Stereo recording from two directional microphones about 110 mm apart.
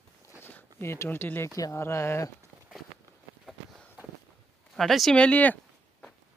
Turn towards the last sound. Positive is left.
turn(degrees=15)  # may be behind; listen again after turning